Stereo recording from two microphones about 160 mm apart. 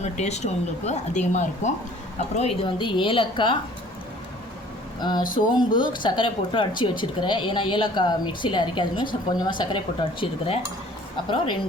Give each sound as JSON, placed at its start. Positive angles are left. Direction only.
{"t": 0.0, "sound": "speech", "side_deg": 45}
{"t": 2.6, "sound": "a woman's voice", "side_deg": 30}
{"t": 4.9, "sound": "a sound", "side_deg": 25}
{"t": 5.5, "sound": "speech", "side_deg": 30}